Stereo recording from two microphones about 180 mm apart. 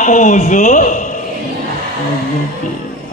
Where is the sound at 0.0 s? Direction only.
45° left (ahead or behind).